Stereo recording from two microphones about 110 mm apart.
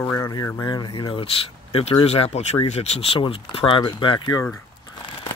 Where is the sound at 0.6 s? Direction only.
40° left (ahead or behind).